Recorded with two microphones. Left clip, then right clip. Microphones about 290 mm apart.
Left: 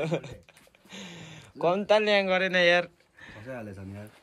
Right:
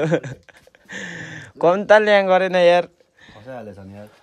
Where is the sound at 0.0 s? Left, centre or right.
Right.